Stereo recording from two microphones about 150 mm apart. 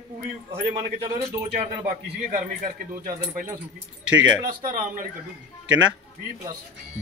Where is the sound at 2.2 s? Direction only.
60° right (ahead or behind).